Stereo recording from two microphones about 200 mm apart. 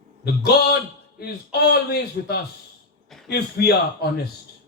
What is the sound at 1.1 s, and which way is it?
A man's voice, 50° left (ahead or behind).